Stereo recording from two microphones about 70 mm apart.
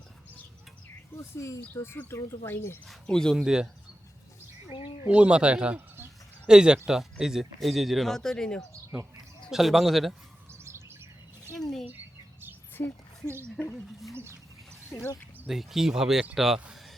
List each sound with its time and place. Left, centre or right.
1.1 s speech: left
1.7 s speech: left
2.8 s speech: centre
3.3 s speech: centre
5.0 s speech: centre
9.5 s speech: centre
10.5 s chirp: right
11.6 s bird: centre
13.2 s speech: right
14.8 s speech: left
15.4 s speech: centre